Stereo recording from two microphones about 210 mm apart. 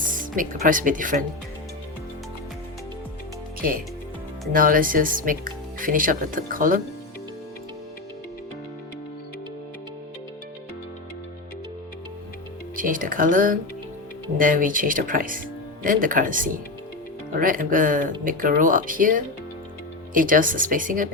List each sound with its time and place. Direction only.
0.1 s speech: 40° right (ahead or behind)
3.6 s speech: 40° right (ahead or behind)
12.7 s speech: 40° right (ahead or behind)